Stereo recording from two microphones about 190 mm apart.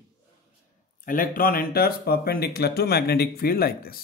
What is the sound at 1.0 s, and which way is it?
A man's voice, 45° left (ahead or behind).